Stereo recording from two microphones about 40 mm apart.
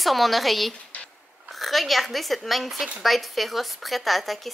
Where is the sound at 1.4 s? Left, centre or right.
Centre.